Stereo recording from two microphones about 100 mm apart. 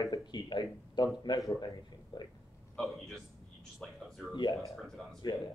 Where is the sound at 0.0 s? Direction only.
40° left (ahead or behind).